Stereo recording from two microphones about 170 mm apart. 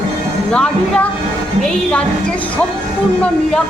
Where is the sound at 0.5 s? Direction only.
5° left (ahead or behind).